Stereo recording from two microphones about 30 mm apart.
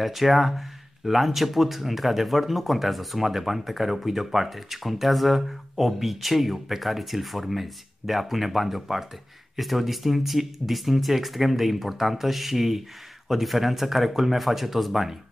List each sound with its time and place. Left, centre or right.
0.0 s speech: centre